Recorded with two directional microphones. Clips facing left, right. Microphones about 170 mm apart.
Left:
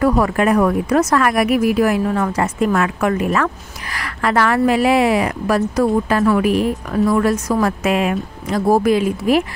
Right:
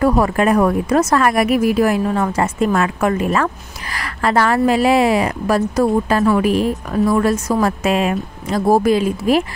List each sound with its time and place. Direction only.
0.0 s a woman's voice: 30° right (ahead or behind)